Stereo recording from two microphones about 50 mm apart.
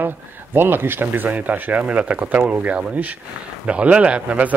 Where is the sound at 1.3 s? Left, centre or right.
Right.